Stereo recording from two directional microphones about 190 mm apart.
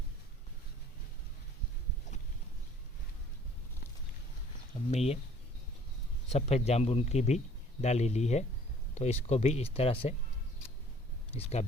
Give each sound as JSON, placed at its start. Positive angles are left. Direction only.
{"t": 4.9, "sound": "a man's voice", "side_deg": 35}
{"t": 6.3, "sound": "a man's voice", "side_deg": 35}
{"t": 11.3, "sound": "a man's voice", "side_deg": 30}